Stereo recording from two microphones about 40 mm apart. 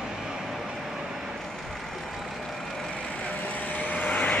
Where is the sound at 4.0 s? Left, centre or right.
Left.